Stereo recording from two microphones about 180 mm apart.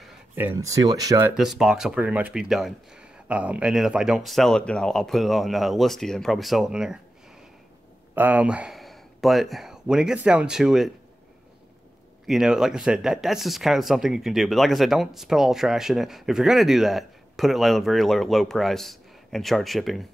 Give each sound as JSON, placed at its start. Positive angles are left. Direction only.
{"t": 0.4, "sound": "speech", "side_deg": -15}
{"t": 1.3, "sound": "speech", "side_deg": 0}
{"t": 8.1, "sound": "speech", "side_deg": -10}
{"t": 12.3, "sound": "speech", "side_deg": -5}